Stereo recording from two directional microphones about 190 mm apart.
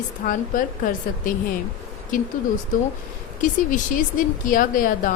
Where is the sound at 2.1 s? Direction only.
45° left (ahead or behind).